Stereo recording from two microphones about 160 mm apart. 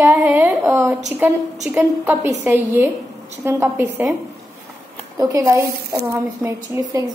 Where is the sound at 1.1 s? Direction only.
10° right (ahead or behind).